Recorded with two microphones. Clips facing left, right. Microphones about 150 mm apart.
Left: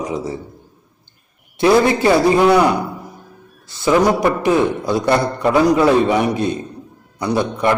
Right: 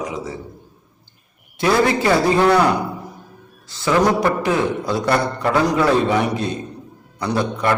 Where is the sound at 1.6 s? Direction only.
20° left (ahead or behind).